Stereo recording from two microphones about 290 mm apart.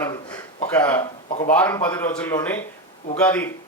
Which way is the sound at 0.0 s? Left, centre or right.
Centre.